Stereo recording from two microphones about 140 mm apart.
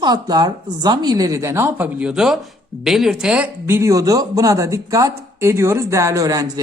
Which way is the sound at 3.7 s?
20° right (ahead or behind).